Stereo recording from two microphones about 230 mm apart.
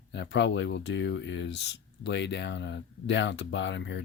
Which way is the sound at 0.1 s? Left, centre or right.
Left.